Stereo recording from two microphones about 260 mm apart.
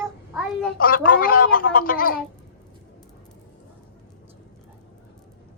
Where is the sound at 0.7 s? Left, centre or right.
Left.